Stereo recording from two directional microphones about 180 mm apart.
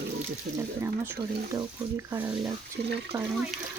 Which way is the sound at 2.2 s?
10° right (ahead or behind).